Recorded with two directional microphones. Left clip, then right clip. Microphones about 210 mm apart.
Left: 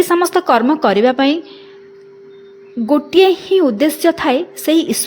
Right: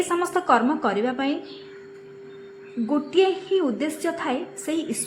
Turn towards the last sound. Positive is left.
turn(degrees=45)  # may be behind; listen again after turning